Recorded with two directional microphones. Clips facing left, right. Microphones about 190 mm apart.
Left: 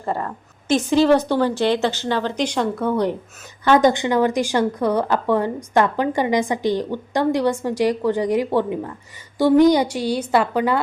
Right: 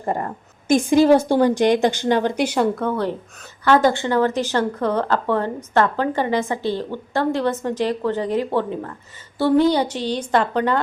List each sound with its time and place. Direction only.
0.0 s a woman's voice: 20° right (ahead or behind); by 2.8 s 5° right (ahead or behind)
2.8 s speech: 15° left (ahead or behind)